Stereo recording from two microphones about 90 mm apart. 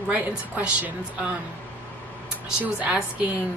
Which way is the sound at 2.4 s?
15° right (ahead or behind).